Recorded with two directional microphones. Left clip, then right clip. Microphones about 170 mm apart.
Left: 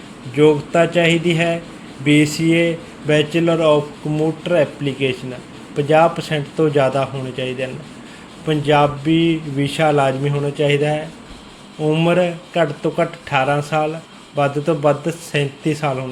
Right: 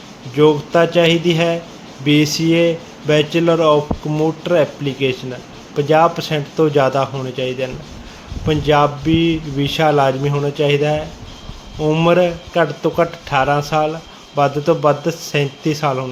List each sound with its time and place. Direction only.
0.3 s speech: 25° right (ahead or behind)